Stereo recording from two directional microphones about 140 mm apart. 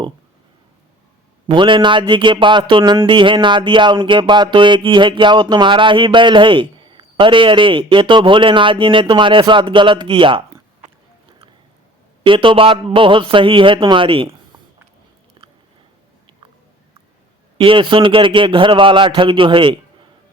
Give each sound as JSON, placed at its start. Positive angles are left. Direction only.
{"t": 1.5, "sound": "a man's voice", "side_deg": -35}
{"t": 12.2, "sound": "a man's voice", "side_deg": -40}
{"t": 15.4, "sound": "biting", "side_deg": -35}
{"t": 17.6, "sound": "a man's voice", "side_deg": -40}